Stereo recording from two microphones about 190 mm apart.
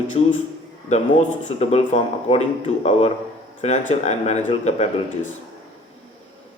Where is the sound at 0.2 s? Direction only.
30° left (ahead or behind).